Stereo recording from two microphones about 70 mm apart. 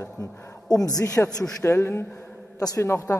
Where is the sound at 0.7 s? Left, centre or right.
Left.